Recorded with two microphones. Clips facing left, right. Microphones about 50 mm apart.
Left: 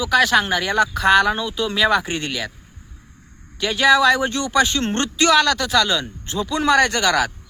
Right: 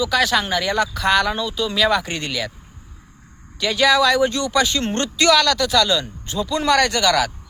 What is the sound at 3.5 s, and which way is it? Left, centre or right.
Speech, left.